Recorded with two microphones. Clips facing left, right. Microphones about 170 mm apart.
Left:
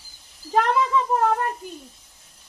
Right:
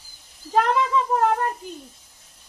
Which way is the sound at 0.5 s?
Centre (ahead or behind).